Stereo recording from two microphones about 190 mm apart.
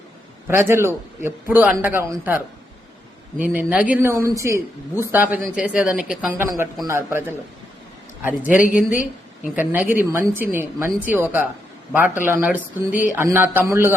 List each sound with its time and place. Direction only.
0.4 s speech: 10° right (ahead or behind)
3.4 s speech: 5° right (ahead or behind)
8.5 s a woman's voice: 45° left (ahead or behind)
9.6 s a man's voice: 10° right (ahead or behind)